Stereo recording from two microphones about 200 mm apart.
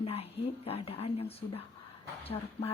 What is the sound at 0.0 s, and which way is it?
Speech, 30° left (ahead or behind).